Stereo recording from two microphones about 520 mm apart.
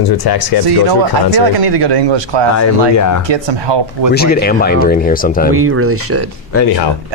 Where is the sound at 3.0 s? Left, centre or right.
Left.